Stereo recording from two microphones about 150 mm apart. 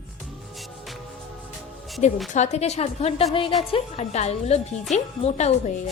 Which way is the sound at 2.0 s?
50° left (ahead or behind).